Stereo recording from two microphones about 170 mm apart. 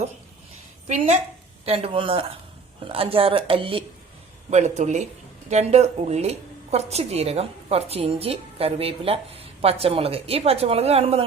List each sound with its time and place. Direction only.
0.9 s a woman's voice: 45° right (ahead or behind)
4.5 s a woman's voice: 40° right (ahead or behind)